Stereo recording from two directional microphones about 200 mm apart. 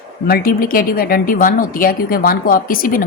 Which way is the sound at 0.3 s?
50° left (ahead or behind).